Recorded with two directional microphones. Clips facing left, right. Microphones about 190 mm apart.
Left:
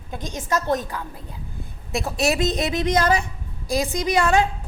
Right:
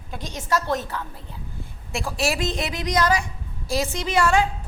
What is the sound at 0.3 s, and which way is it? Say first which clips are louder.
A woman's voice: left 1 dB; 20° left (ahead or behind).